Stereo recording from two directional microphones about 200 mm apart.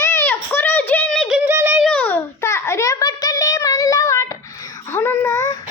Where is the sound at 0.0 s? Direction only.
15° left (ahead or behind).